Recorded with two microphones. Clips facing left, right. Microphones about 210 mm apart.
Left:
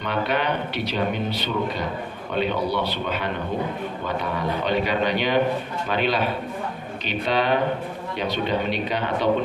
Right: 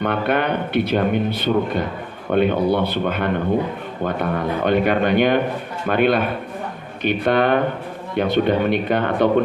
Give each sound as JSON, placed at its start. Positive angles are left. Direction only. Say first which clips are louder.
{"t": 0.0, "sound": "speech", "louder": "right 4 dB", "side_deg": -55}